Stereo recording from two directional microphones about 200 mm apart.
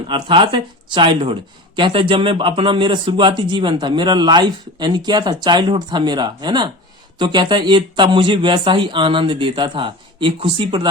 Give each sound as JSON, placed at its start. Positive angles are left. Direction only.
{"t": 0.1, "sound": "speech", "side_deg": -25}